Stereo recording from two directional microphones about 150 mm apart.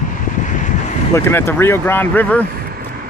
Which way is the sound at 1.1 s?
15° left (ahead or behind).